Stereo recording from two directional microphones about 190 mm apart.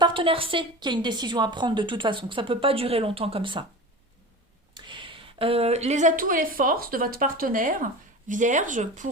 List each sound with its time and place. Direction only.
0.0 s a woman's voice: 25° right (ahead or behind)
4.7 s a woman's voice: 25° right (ahead or behind); by 9.0 s 40° right (ahead or behind)